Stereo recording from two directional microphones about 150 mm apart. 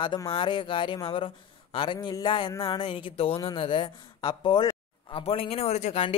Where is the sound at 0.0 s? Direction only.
30° left (ahead or behind).